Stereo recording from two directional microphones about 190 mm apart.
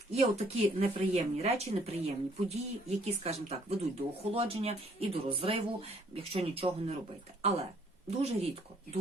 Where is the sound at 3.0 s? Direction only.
35° right (ahead or behind).